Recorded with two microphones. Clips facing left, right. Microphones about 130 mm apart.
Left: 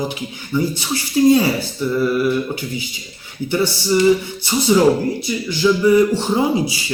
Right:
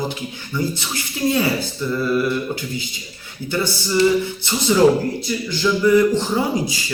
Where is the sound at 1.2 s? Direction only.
25° left (ahead or behind).